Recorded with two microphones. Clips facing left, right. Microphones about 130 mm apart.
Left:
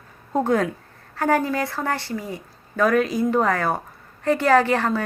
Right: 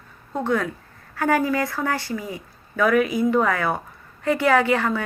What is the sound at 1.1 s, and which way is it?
A woman's voice, 30° left (ahead or behind).